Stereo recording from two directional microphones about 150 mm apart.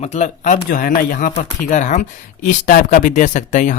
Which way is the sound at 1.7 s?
55° left (ahead or behind).